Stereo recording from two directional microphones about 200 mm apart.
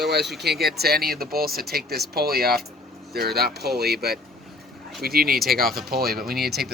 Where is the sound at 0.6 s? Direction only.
50° right (ahead or behind).